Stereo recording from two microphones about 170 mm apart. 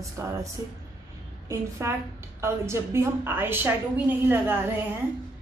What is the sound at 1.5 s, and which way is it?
A woman's voice, 15° right (ahead or behind).